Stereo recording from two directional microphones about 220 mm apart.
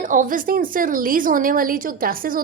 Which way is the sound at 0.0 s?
35° right (ahead or behind).